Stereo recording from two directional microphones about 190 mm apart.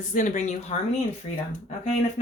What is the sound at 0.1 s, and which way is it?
Speech, 40° left (ahead or behind).